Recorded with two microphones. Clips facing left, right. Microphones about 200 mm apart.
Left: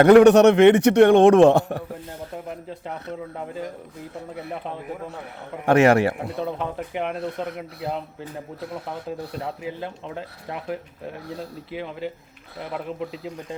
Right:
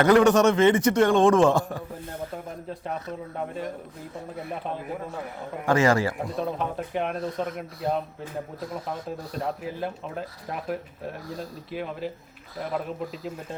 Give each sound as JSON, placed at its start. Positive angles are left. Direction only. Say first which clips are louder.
{"t": 0.0, "sound": "a man's voice", "louder": "left 6 dB", "side_deg": 65}
{"t": 5.6, "sound": "a man's voice", "louder": "left 5 dB", "side_deg": 65}
{"t": 11.3, "sound": "a man's voice", "louder": "left 2 dB", "side_deg": 65}